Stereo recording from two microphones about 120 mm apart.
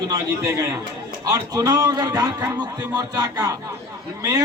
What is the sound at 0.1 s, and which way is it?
A man's voice, 25° right (ahead or behind).